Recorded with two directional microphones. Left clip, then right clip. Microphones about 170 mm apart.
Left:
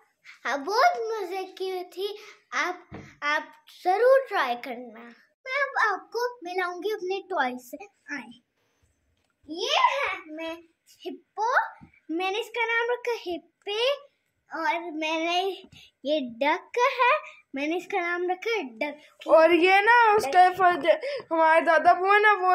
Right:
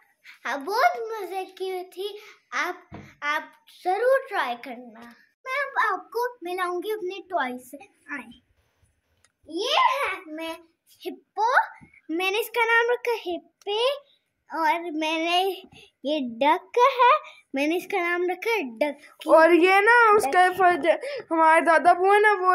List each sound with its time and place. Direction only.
0.4 s a child's voice: 5° left (ahead or behind)
2.2 s a child's voice: 5° right (ahead or behind); by 5.2 s 15° left (ahead or behind)
5.4 s child singing: centre (ahead or behind)
9.5 s a child's voice: 40° right (ahead or behind)
12.3 s child singing: 65° right (ahead or behind); by 13.1 s 40° right (ahead or behind)
13.1 s a woman's voice: 20° right (ahead or behind)
13.7 s child singing: 5° right (ahead or behind)
14.5 s a child's voice: 40° right (ahead or behind)
19.2 s a woman's voice: 20° right (ahead or behind)